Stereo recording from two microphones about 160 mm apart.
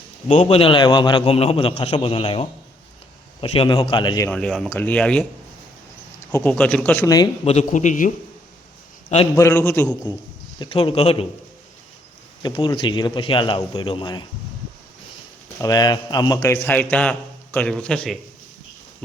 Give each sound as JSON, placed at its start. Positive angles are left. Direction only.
{"t": 0.3, "sound": "a man's voice", "side_deg": 45}
{"t": 4.3, "sound": "a man's voice", "side_deg": 5}
{"t": 6.3, "sound": "a man's voice", "side_deg": 10}
{"t": 7.4, "sound": "a man's voice", "side_deg": 45}
{"t": 9.3, "sound": "a man's voice", "side_deg": 20}
{"t": 10.6, "sound": "a man's voice", "side_deg": 35}
{"t": 12.4, "sound": "a man's voice", "side_deg": 30}
{"t": 15.6, "sound": "a man's voice", "side_deg": 25}